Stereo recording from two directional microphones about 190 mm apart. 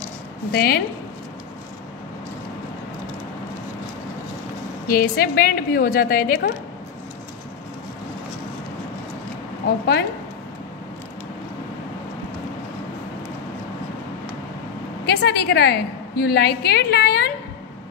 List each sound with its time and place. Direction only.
0.5 s a woman's voice: 55° left (ahead or behind)
4.8 s a woman's voice: 50° left (ahead or behind)
15.0 s a woman's voice: 60° left (ahead or behind)